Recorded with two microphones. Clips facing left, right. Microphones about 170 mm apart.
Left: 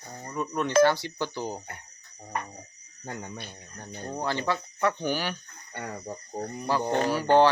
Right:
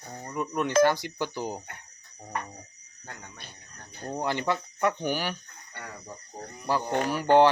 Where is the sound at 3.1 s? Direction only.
40° left (ahead or behind).